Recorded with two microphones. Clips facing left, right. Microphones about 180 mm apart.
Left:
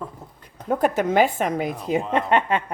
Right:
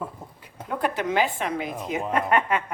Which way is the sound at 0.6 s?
45° left (ahead or behind).